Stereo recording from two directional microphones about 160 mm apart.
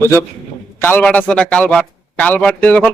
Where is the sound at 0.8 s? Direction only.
10° left (ahead or behind).